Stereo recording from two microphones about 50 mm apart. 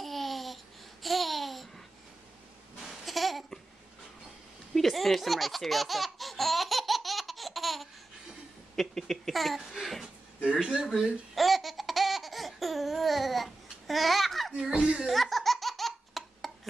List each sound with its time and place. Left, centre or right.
0.0 s babbling: centre
3.1 s babbling: centre
4.7 s laughter: centre
8.7 s speech: centre
10.4 s speech: centre
11.3 s laughter: centre
14.8 s speech: centre
15.1 s laughter: centre